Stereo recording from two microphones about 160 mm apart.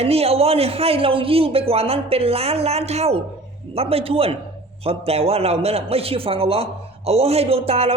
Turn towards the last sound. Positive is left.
turn(degrees=-40)  # may be behind; listen again after turning